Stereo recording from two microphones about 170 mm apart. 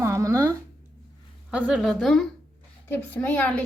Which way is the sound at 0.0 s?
15° right (ahead or behind).